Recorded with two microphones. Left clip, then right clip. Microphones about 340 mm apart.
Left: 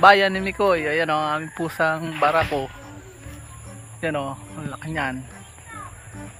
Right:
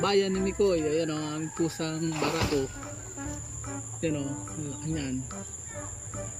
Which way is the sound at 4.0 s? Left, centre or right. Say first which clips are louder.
Left 7 dB; centre.